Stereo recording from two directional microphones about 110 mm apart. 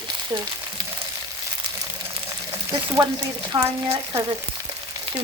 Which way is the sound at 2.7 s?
35° right (ahead or behind).